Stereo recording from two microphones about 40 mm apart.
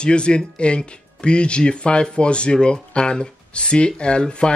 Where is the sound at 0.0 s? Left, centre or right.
Left.